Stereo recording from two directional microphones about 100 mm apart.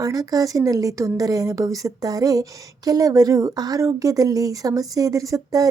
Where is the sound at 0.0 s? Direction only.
40° right (ahead or behind).